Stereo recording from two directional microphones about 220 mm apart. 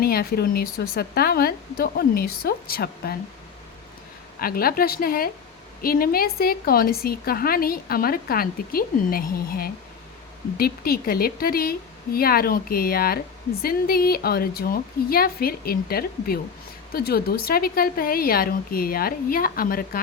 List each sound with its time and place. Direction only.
0.0 s a woman's voice: 45° left (ahead or behind)
4.4 s a woman's voice: 40° left (ahead or behind)